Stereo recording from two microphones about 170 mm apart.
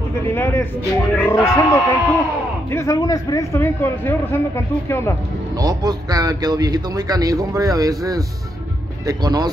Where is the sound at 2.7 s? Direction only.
15° left (ahead or behind).